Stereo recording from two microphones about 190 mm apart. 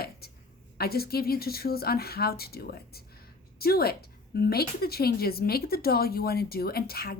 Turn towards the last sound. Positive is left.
turn(degrees=55)  # may be behind; listen again after turning